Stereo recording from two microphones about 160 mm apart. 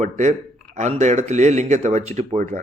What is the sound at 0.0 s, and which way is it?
A man's voice, 45° right (ahead or behind).